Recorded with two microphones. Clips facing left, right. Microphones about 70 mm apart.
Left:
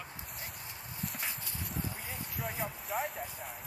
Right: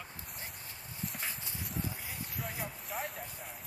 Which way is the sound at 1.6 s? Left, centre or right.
Centre.